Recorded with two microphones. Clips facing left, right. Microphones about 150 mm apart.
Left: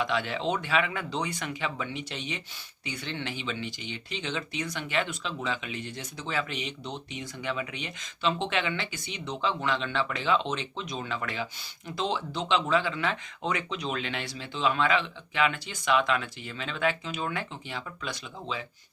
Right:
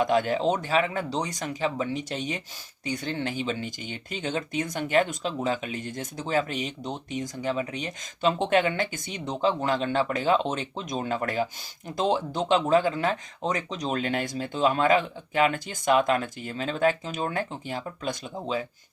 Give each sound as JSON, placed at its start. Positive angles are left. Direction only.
{"t": 0.0, "sound": "speech", "side_deg": -45}